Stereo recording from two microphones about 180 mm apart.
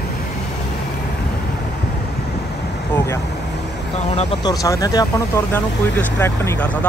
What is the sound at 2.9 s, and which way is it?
Vehicle, 15° left (ahead or behind).